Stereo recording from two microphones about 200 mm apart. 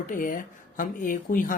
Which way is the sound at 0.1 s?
45° left (ahead or behind).